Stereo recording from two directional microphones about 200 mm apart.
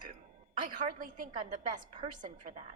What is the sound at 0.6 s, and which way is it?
A woman's voice, 45° right (ahead or behind).